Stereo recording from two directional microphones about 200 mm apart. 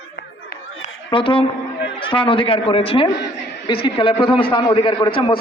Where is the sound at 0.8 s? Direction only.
25° left (ahead or behind).